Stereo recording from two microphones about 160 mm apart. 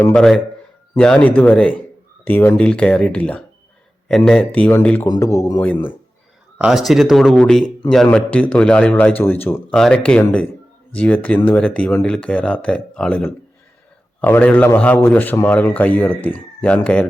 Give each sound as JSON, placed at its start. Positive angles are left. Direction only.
{"t": 0.0, "sound": "speech", "side_deg": 5}
{"t": 5.0, "sound": "speech", "side_deg": 20}
{"t": 6.6, "sound": "speech", "side_deg": -5}